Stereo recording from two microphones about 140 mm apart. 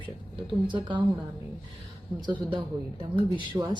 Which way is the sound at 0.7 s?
35° right (ahead or behind).